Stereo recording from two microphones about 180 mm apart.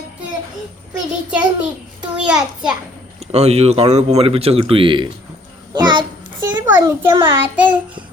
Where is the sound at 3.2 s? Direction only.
35° right (ahead or behind).